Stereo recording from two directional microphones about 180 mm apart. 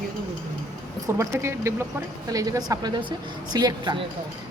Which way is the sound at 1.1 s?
15° right (ahead or behind).